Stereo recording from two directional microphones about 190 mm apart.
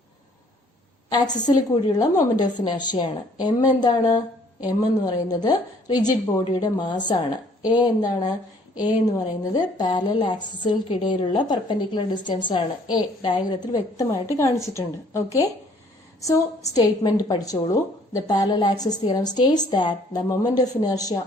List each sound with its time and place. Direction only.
1.5 s a woman's voice: 20° left (ahead or behind)
16.7 s a woman's voice: 20° left (ahead or behind)